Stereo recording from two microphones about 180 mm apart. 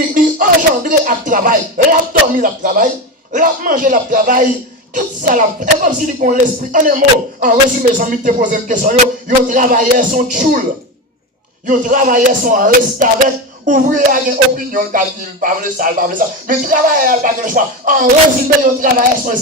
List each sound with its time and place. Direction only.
0.1 s speech: 50° right (ahead or behind)
5.8 s speech: 45° right (ahead or behind)
11.6 s speech: 45° right (ahead or behind)